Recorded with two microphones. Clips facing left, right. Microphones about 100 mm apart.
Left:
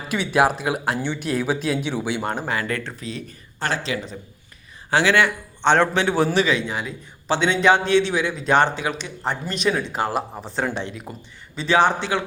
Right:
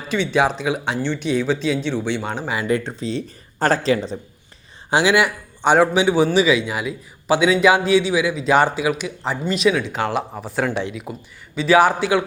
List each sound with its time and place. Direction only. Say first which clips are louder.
0.1 s speech: right 1 dB; 5° left (ahead or behind)
2.5 s speech: right 4 dB; 15° right (ahead or behind); by 4.2 s 35° right (ahead or behind)
4.9 s a man's voice: right 2 dB; 15° right (ahead or behind)